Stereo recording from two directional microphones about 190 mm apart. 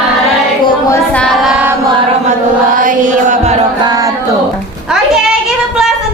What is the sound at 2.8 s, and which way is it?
Music, 45° right (ahead or behind).